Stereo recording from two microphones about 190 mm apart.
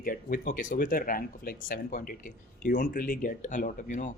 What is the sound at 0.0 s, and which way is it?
Speech, 45° left (ahead or behind).